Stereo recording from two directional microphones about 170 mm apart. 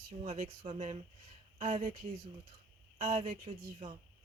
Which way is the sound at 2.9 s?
40° right (ahead or behind).